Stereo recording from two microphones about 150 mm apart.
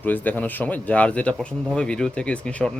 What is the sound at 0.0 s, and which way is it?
Speech, 10° left (ahead or behind).